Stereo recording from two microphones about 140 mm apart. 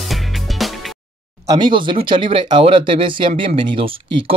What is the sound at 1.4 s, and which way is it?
Speech, 25° right (ahead or behind).